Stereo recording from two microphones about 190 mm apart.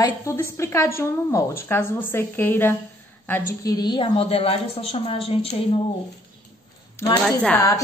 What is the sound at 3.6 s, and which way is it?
A woman's voice, 20° left (ahead or behind).